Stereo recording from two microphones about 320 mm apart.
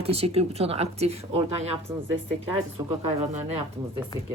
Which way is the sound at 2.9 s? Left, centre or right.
Right.